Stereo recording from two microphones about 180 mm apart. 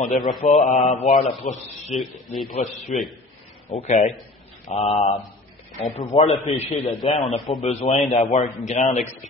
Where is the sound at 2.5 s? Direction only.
40° left (ahead or behind).